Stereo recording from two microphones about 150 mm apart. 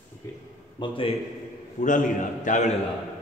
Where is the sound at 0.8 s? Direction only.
35° left (ahead or behind).